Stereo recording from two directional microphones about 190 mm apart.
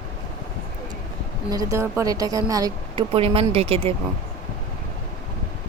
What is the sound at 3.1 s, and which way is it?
Speech, 30° right (ahead or behind).